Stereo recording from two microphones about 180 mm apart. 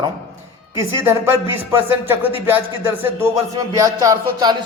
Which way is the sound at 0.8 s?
15° right (ahead or behind).